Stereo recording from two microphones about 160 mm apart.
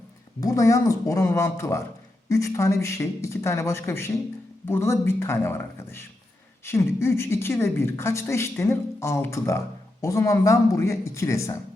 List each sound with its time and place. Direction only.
0.3 s a woman's voice: 20° left (ahead or behind)